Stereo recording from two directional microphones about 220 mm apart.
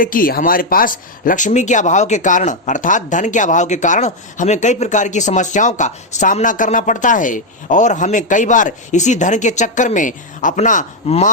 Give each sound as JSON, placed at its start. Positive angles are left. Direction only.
{"t": 0.0, "sound": "speech", "side_deg": 40}